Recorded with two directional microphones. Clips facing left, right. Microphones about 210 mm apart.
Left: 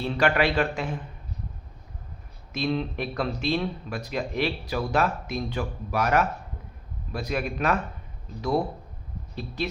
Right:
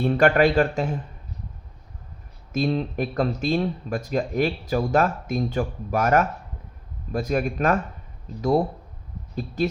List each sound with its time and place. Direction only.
0.0 s speech: 50° right (ahead or behind)
2.5 s speech: 45° right (ahead or behind)